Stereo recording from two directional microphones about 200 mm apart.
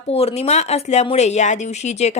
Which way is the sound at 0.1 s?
30° left (ahead or behind).